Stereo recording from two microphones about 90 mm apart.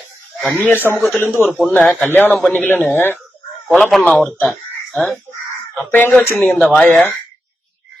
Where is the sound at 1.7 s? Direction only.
15° left (ahead or behind).